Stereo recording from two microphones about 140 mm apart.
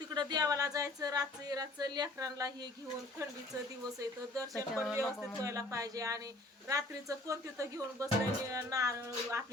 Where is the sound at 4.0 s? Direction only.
25° right (ahead or behind).